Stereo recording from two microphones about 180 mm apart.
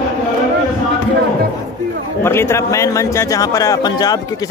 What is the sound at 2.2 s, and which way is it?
A man's voice, 15° left (ahead or behind).